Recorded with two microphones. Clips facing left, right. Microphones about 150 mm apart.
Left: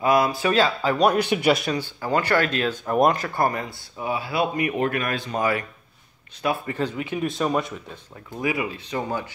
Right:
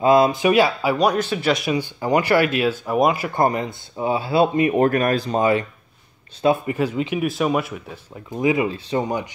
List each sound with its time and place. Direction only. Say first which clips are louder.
0.0 s speech: right 5 dB; 25° right (ahead or behind)
0.9 s speech: left 1 dB; centre (ahead or behind)
1.2 s a man's voice: left 1 dB; 15° left (ahead or behind)
1.6 s speech: right 4 dB; 10° right (ahead or behind)
3.3 s speech: right 4 dB; 20° right (ahead or behind)
4.7 s speech: right 7 dB; 40° right (ahead or behind)
5.4 s speech: right 5 dB; 25° right (ahead or behind)
7.2 s speech: even; 5° right (ahead or behind)
8.4 s speech: right 6 dB; 25° right (ahead or behind)